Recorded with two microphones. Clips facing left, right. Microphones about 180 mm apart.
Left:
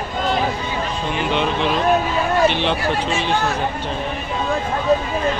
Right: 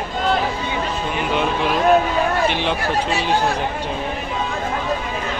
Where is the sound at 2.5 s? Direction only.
10° right (ahead or behind).